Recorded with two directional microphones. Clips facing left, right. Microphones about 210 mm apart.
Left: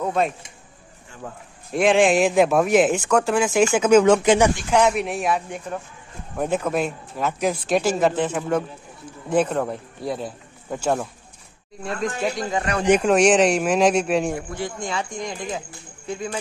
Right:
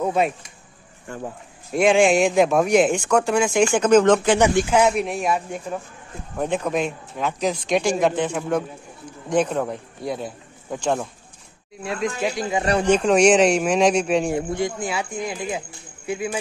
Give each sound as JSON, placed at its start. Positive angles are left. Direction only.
{"t": 0.0, "sound": "speech", "side_deg": -5}
{"t": 1.7, "sound": "speech", "side_deg": 0}
{"t": 4.4, "sound": "a man's voice", "side_deg": 0}
{"t": 14.3, "sound": "speech", "side_deg": -20}
{"t": 14.8, "sound": "speech", "side_deg": -5}